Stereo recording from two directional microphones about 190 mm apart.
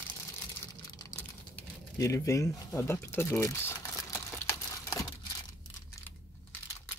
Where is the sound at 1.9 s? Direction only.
15° left (ahead or behind).